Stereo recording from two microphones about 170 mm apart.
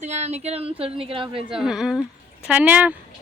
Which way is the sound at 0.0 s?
40° right (ahead or behind).